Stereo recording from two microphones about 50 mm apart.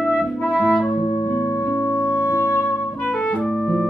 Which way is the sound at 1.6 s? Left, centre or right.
Left.